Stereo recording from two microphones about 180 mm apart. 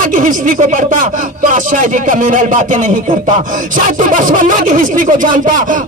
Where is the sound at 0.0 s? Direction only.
45° right (ahead or behind).